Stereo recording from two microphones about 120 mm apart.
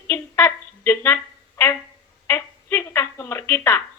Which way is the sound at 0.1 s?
20° left (ahead or behind).